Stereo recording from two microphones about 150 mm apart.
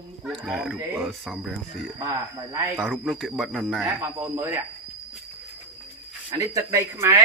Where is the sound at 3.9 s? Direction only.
15° right (ahead or behind).